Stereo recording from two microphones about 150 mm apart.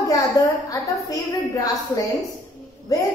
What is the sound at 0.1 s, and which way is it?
A woman's voice, 20° left (ahead or behind).